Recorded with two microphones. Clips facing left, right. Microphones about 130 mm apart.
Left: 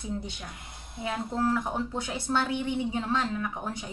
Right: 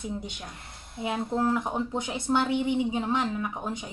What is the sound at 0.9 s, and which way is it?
Speech, 20° right (ahead or behind).